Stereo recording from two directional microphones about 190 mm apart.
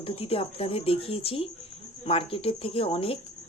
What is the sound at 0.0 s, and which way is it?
Speech, 30° left (ahead or behind).